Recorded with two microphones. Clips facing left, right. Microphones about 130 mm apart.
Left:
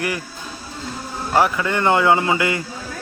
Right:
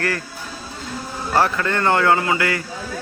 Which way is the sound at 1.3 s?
15° left (ahead or behind).